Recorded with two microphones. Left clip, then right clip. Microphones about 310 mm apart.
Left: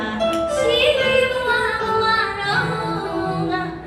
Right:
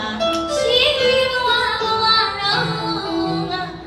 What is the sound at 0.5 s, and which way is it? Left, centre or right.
Music, right.